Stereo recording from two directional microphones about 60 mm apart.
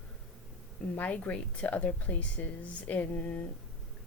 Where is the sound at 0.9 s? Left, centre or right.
Left.